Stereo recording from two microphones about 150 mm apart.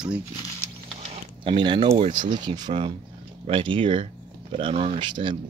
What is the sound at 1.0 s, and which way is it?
Speech, 40° right (ahead or behind).